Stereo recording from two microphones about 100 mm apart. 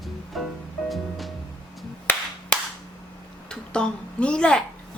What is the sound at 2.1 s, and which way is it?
Clapping, 20° left (ahead or behind).